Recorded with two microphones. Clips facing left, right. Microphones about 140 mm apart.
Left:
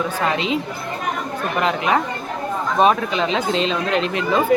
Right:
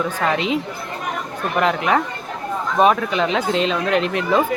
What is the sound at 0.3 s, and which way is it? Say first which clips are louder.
Speech: right 1 dB; 20° left (ahead or behind).